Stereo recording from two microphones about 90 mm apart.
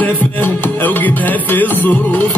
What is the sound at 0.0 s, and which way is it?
Music, 20° left (ahead or behind).